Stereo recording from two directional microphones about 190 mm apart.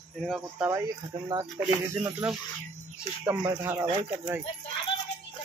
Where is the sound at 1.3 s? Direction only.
15° right (ahead or behind).